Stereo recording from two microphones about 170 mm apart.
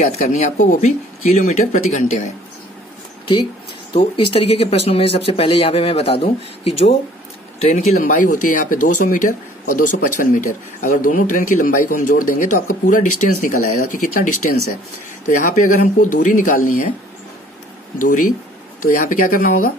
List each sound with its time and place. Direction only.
0.0 s speech: 40° left (ahead or behind)
3.9 s speech: 30° left (ahead or behind); by 16.9 s 50° left (ahead or behind)
18.0 s speech: 50° left (ahead or behind)